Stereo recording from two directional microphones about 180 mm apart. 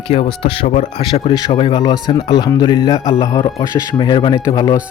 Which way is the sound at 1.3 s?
20° left (ahead or behind).